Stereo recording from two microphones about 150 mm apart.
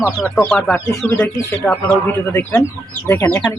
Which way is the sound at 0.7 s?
Centre (ahead or behind).